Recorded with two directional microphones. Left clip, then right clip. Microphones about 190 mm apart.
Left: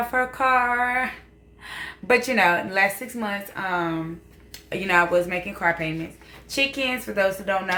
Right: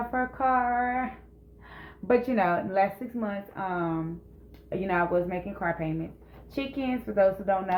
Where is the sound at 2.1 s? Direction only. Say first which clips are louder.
Left 5 dB; 15° left (ahead or behind).